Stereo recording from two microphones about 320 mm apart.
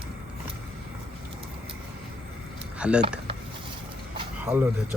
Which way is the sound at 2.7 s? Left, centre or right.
Centre.